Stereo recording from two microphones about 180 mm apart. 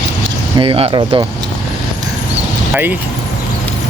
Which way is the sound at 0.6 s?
30° right (ahead or behind).